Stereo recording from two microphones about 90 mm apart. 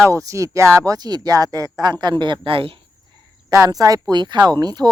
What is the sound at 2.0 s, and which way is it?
Speech, 60° right (ahead or behind).